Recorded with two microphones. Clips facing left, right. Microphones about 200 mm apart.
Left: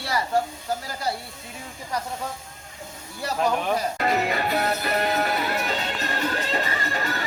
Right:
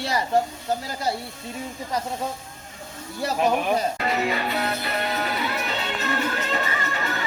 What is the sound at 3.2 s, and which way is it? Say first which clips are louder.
Speech: right 2 dB; 20° right (ahead or behind).